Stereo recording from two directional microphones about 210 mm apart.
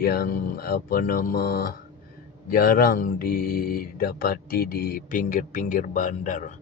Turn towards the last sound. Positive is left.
turn(degrees=35)  # may be behind; listen again after turning